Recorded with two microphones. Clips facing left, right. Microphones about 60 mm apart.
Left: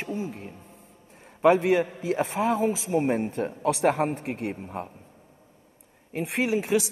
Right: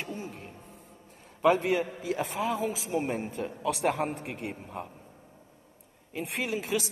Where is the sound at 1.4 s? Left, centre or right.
Left.